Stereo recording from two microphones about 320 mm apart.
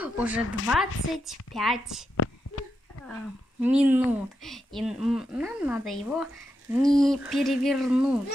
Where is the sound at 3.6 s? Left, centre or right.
Centre.